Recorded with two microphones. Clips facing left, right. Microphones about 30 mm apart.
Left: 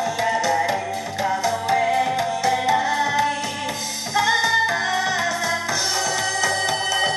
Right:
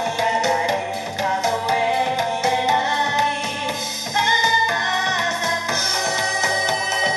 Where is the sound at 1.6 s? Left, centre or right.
Right.